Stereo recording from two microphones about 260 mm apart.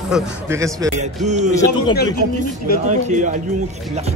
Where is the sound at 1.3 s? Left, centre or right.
Right.